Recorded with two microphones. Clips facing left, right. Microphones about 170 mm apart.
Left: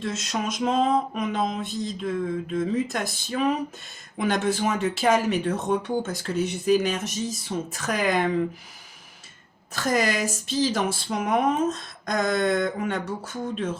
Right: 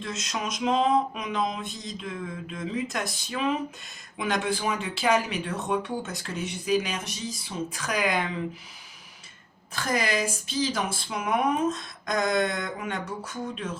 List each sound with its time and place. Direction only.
0.0 s speech: 45° left (ahead or behind)
9.7 s speech: 45° left (ahead or behind)